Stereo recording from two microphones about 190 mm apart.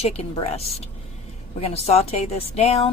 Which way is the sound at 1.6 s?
30° left (ahead or behind).